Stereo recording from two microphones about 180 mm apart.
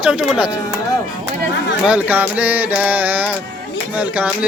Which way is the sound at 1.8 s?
10° right (ahead or behind).